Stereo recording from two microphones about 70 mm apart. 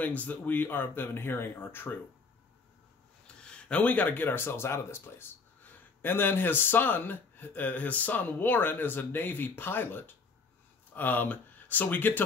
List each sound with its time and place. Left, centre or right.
0.0 s speech: left
3.4 s speech: centre